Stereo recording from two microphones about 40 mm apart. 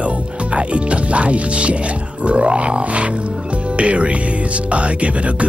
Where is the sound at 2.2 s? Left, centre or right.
Right.